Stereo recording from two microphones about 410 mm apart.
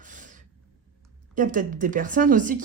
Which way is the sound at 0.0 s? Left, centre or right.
Centre.